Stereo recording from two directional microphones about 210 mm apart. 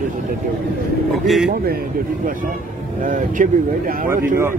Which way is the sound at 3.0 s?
40° right (ahead or behind).